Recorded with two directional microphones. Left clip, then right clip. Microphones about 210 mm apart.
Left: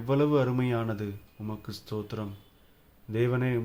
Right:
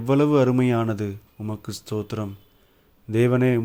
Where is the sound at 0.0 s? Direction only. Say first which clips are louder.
Right 7 dB; 40° right (ahead or behind).